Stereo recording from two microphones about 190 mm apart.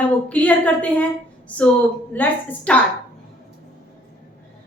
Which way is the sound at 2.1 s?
10° left (ahead or behind).